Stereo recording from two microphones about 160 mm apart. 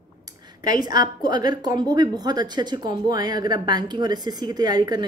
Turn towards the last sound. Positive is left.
turn(degrees=-25)  # may be behind; listen again after turning